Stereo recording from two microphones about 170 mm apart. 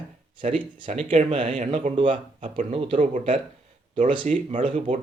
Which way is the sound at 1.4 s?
50° right (ahead or behind).